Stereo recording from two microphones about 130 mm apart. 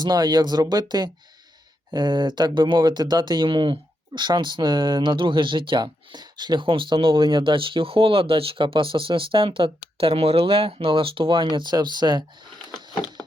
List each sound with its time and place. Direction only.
0.0 s speech: 30° right (ahead or behind)